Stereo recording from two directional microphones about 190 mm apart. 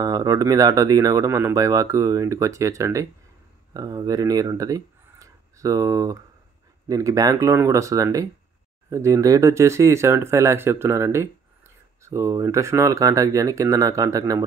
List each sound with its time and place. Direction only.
0.0 s speech: 20° right (ahead or behind)